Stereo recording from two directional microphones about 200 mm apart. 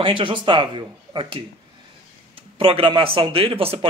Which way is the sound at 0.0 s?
25° right (ahead or behind).